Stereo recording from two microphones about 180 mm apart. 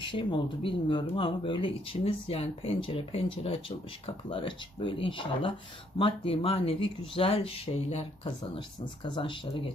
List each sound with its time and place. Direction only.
0.0 s speech: 25° left (ahead or behind)